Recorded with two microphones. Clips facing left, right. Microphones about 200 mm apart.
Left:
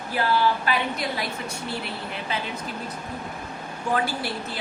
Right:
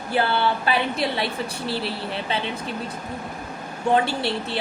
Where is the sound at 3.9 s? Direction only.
25° right (ahead or behind).